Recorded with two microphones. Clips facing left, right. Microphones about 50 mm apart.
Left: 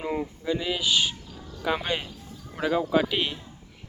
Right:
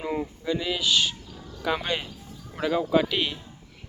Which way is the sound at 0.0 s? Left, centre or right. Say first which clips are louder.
Even; centre.